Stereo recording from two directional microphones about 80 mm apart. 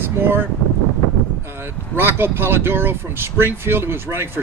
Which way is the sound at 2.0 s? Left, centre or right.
Right.